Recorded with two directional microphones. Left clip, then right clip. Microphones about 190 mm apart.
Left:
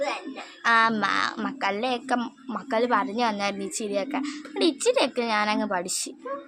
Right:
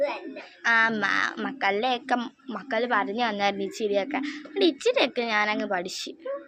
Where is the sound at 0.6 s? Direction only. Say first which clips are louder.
Left 1 dB; 20° left (ahead or behind).